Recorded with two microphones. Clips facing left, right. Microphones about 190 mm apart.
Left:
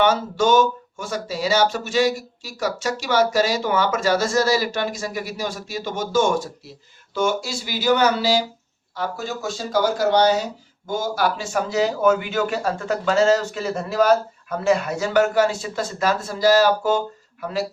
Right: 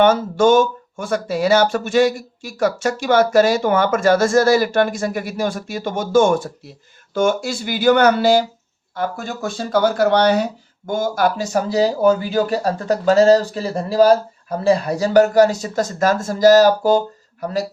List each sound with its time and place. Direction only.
0.0 s speech: 50° right (ahead or behind)